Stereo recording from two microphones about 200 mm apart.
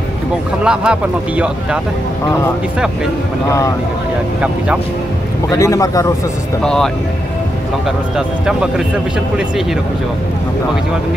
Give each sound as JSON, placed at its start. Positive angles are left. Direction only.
{"t": 0.7, "sound": "speech", "side_deg": -5}
{"t": 3.4, "sound": "a man's voice", "side_deg": 15}
{"t": 5.5, "sound": "a man's voice", "side_deg": 15}
{"t": 6.6, "sound": "speech", "side_deg": 5}
{"t": 8.5, "sound": "speech", "side_deg": -5}